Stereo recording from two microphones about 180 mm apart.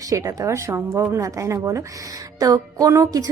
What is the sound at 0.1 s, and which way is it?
A woman's voice, 20° right (ahead or behind).